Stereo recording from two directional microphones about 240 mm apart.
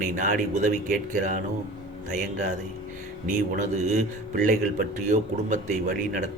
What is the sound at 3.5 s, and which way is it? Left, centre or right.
A man's voice, right.